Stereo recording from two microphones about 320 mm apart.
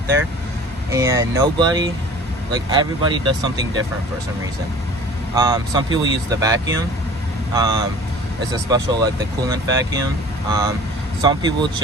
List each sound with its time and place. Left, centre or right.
0.9 s speech: centre
5.3 s speech: centre